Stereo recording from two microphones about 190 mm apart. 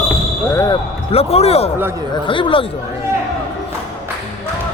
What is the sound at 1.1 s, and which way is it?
Speech, 30° left (ahead or behind).